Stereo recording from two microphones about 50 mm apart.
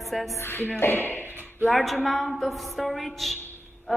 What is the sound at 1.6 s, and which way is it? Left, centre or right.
A woman's voice, centre.